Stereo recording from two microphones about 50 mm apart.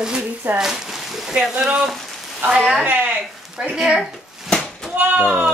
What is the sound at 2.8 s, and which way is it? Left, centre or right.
Speech, right.